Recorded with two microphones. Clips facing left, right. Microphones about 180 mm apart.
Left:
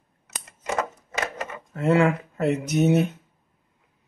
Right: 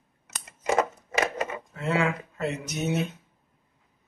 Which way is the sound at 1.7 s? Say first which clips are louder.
Left 8 dB; 55° left (ahead or behind).